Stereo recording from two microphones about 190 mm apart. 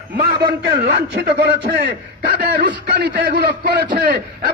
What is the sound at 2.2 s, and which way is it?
A man's voice, 55° right (ahead or behind).